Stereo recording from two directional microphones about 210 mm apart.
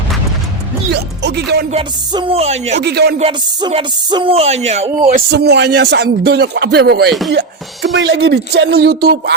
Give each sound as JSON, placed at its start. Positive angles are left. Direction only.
{"t": 0.9, "sound": "speech", "side_deg": -50}
{"t": 1.7, "sound": "speech", "side_deg": -25}
{"t": 2.8, "sound": "speech", "side_deg": -50}
{"t": 3.2, "sound": "speech", "side_deg": -30}
{"t": 5.3, "sound": "speech", "side_deg": -50}
{"t": 7.3, "sound": "music", "side_deg": -55}
{"t": 7.9, "sound": "speech", "side_deg": -55}